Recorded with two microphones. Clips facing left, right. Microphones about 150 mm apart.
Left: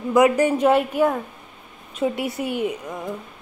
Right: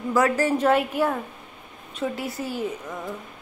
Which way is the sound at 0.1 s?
20° left (ahead or behind).